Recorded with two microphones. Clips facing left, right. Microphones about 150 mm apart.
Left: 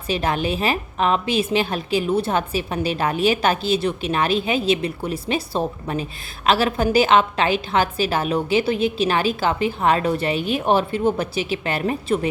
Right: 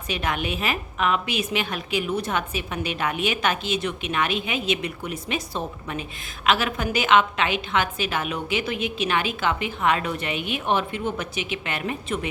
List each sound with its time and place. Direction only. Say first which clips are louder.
0.1 s a woman's voice: left 5 dB; 30° left (ahead or behind)